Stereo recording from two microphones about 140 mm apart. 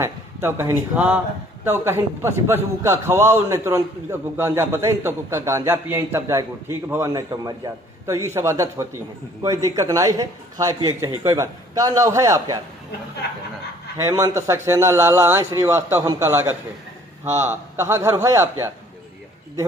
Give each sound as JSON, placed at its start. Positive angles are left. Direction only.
{"t": 0.0, "sound": "a man's voice", "side_deg": -20}
{"t": 14.0, "sound": "a man's voice", "side_deg": -20}